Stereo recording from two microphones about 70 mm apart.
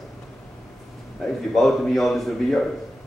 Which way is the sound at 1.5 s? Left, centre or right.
Centre.